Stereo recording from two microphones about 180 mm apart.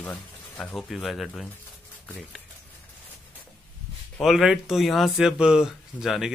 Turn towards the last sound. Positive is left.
turn(degrees=0)  # may be behind; listen again after turning